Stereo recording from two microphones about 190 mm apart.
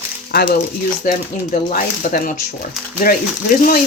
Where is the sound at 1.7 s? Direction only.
45° left (ahead or behind).